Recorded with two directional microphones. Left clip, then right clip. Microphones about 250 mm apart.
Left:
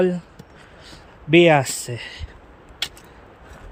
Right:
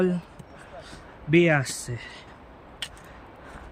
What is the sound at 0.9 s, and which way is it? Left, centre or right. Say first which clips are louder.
Speech: left 6 dB; centre.